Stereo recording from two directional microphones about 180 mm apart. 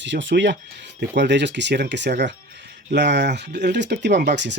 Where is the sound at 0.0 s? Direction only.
90° right.